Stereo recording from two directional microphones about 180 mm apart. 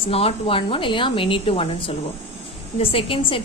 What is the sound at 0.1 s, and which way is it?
A woman's voice, 35° left (ahead or behind).